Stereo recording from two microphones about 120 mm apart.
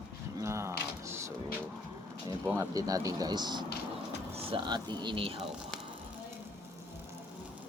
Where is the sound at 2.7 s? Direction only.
30° right (ahead or behind).